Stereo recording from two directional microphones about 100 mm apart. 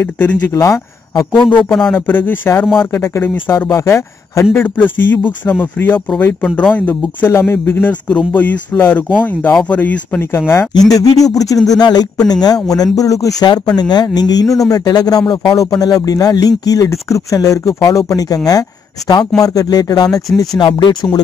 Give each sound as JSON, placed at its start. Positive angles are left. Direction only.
{"t": 0.0, "sound": "speech", "side_deg": 15}
{"t": 0.5, "sound": "speech", "side_deg": 30}
{"t": 1.9, "sound": "speech", "side_deg": 20}
{"t": 4.6, "sound": "speech", "side_deg": 20}
{"t": 10.9, "sound": "speech", "side_deg": 35}
{"t": 20.3, "sound": "speech", "side_deg": 50}